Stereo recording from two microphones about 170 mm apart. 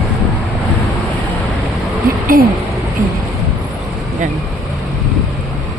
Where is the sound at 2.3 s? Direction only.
55° right (ahead or behind).